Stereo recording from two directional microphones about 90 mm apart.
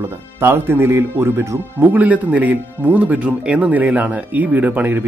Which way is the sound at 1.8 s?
20° right (ahead or behind).